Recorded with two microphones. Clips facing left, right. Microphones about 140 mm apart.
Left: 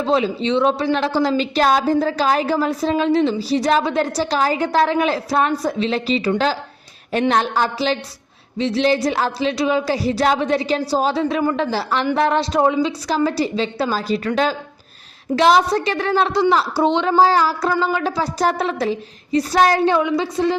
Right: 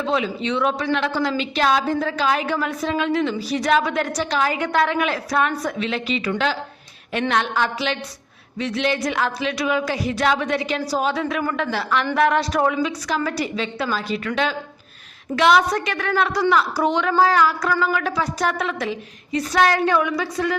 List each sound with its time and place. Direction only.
0.0 s speech: 30° left (ahead or behind)